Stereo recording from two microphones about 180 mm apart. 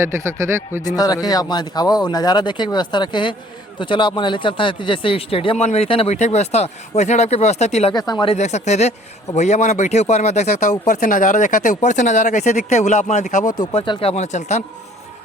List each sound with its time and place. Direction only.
0.0 s speech: 15° right (ahead or behind)
0.9 s speech: 20° left (ahead or behind); by 7.9 s 40° left (ahead or behind)
7.9 s speech: 25° left (ahead or behind)
8.4 s speech: 40° left (ahead or behind)
13.7 s speech: 30° left (ahead or behind)